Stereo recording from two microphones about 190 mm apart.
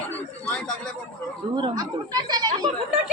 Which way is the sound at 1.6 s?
20° right (ahead or behind).